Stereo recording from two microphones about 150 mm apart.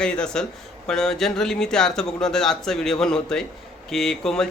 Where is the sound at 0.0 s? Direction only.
5° left (ahead or behind).